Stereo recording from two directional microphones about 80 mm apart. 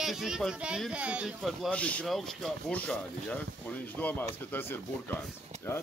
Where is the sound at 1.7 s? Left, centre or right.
Centre.